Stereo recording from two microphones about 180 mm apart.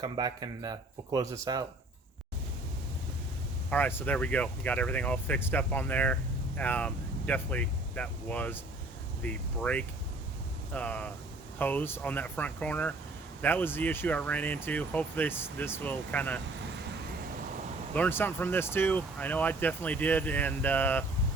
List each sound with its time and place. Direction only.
0.0 s speech: 25° right (ahead or behind)
3.7 s speech: 10° left (ahead or behind)
17.9 s speech: 10° left (ahead or behind)